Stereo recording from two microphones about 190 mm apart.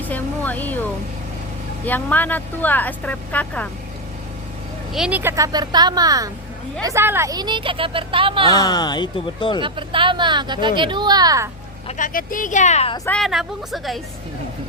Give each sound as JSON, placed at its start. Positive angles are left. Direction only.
{"t": 0.0, "sound": "a sound", "side_deg": 10}
{"t": 1.8, "sound": "speech", "side_deg": 10}
{"t": 4.9, "sound": "speech", "side_deg": -5}
{"t": 8.5, "sound": "speech", "side_deg": 20}
{"t": 9.6, "sound": "speech", "side_deg": -25}
{"t": 11.9, "sound": "speech", "side_deg": 45}
{"t": 13.1, "sound": "speech", "side_deg": 0}